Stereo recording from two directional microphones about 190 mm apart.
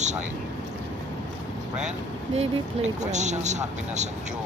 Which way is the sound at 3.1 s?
40° right (ahead or behind).